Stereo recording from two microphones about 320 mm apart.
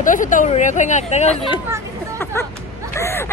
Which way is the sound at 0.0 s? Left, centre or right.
Left.